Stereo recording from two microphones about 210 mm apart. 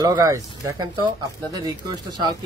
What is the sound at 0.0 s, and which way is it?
Speech, 15° right (ahead or behind).